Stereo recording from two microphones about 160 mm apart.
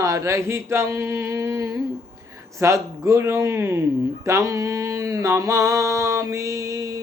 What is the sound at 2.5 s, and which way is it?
Speech, 20° right (ahead or behind).